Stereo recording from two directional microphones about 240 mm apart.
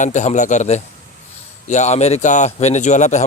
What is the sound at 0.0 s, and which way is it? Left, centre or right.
A man's voice, left.